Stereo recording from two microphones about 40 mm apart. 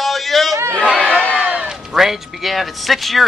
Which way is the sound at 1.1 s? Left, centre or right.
Left.